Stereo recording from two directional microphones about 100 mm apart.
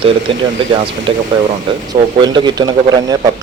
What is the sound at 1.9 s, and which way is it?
Speech, 45° right (ahead or behind).